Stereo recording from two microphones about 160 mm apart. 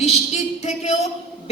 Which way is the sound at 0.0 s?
40° left (ahead or behind).